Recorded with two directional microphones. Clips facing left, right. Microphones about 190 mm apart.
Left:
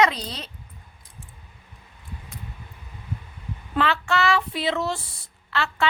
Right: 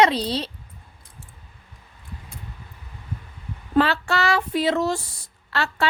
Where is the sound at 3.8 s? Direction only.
35° right (ahead or behind).